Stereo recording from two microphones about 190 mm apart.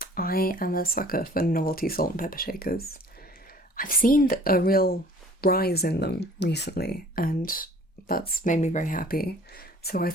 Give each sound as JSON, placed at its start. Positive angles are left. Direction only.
{"t": 0.0, "sound": "speech", "side_deg": 50}